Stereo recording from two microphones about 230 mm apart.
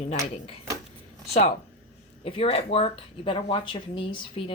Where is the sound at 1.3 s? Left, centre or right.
Left.